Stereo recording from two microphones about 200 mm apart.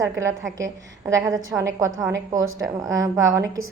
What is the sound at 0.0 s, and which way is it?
A woman's voice, 15° right (ahead or behind).